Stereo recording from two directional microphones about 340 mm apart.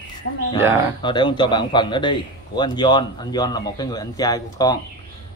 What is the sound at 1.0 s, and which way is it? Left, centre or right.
Speech, centre.